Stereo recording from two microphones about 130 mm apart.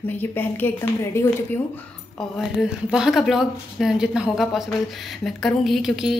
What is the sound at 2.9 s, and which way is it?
A woman's voice, 5° right (ahead or behind).